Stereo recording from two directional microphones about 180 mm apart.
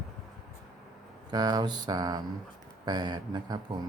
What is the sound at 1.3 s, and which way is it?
Speech, 20° right (ahead or behind).